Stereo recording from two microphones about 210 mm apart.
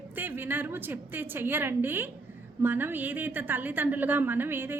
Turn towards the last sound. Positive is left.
turn(degrees=-10)  # may be behind; listen again after turning